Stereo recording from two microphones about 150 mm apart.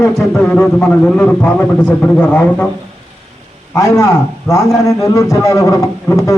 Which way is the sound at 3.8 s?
20° left (ahead or behind).